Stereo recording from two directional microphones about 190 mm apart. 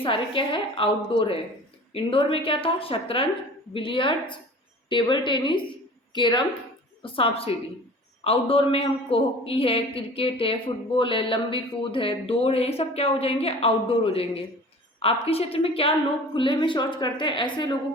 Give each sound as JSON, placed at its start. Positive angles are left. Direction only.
{"t": 0.0, "sound": "a man's voice", "side_deg": 25}